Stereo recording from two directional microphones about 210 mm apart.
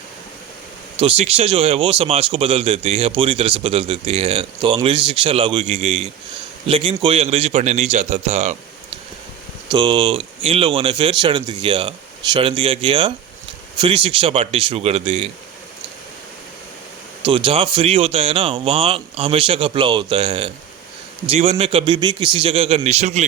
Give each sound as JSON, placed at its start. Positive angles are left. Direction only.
{"t": 0.9, "sound": "speech", "side_deg": -30}
{"t": 17.2, "sound": "speech", "side_deg": -25}